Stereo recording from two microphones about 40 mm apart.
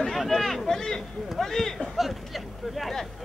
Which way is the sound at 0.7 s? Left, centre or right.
Centre.